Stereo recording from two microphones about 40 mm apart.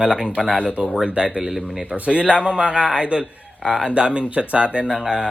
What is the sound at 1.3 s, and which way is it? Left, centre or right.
Speech, centre.